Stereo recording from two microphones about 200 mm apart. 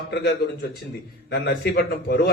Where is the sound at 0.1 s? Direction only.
55° left (ahead or behind).